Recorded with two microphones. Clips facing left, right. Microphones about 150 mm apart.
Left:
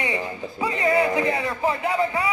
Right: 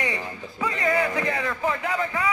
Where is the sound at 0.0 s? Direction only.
25° left (ahead or behind).